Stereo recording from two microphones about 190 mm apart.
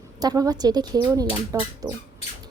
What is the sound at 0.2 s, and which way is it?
A woman's voice, 20° right (ahead or behind).